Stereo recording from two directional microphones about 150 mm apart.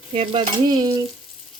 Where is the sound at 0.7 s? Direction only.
25° right (ahead or behind).